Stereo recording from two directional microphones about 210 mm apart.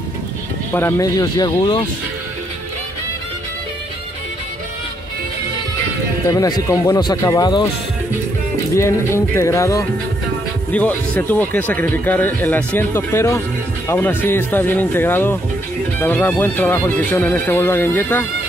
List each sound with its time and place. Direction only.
0.7 s speech: 15° left (ahead or behind)
6.2 s speech: 15° left (ahead or behind)
8.7 s speech: 15° left (ahead or behind)